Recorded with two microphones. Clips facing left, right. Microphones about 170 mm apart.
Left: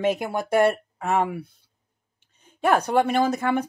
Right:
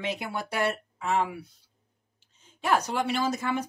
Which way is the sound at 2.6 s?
55° left (ahead or behind).